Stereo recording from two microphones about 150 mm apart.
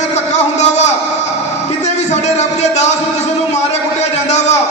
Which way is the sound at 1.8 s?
50° left (ahead or behind).